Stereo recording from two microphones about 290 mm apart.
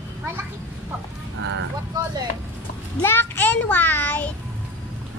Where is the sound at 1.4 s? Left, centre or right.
Right.